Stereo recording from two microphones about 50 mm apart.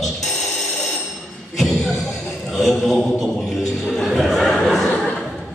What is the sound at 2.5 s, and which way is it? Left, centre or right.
A man's voice, centre.